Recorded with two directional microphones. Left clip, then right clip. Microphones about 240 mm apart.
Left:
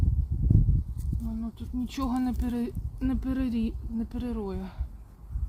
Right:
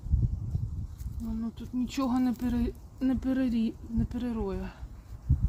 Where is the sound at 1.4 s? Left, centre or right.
Centre.